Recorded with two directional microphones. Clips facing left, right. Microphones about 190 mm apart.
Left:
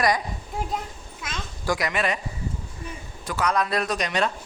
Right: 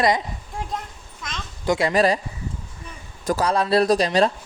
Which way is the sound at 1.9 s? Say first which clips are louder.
Right 7 dB; 35° right (ahead or behind).